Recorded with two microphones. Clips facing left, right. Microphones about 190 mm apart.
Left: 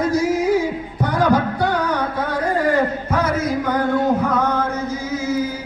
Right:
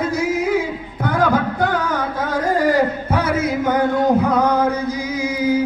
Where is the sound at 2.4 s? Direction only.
35° right (ahead or behind).